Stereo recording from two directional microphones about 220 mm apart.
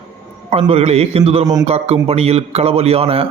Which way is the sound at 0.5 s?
25° right (ahead or behind).